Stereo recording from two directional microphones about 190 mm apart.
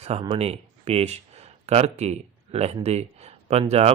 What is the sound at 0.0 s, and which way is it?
Speech, 35° right (ahead or behind).